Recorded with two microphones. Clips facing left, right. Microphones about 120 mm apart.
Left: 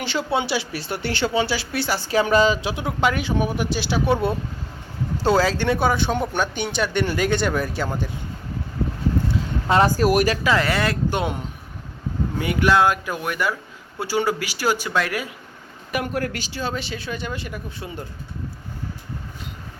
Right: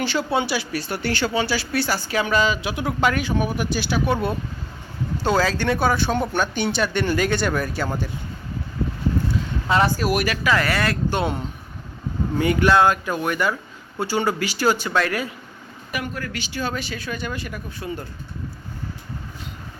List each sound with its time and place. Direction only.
0.0 s speech: 20° left (ahead or behind)
2.0 s speech: 35° left (ahead or behind)
5.1 s speech: 30° left (ahead or behind)
9.6 s speech: 35° left (ahead or behind)
10.4 s speech: 25° left (ahead or behind)
12.4 s speech: 5° left (ahead or behind)
15.9 s speech: 55° left (ahead or behind)
16.4 s speech: 30° left (ahead or behind)